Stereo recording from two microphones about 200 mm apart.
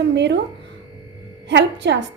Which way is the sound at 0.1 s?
60° right (ahead or behind).